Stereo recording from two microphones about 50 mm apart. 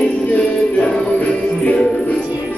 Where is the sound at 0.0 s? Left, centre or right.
Left.